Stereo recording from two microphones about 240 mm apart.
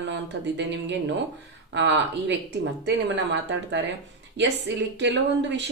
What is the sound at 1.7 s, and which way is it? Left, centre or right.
Speech, right.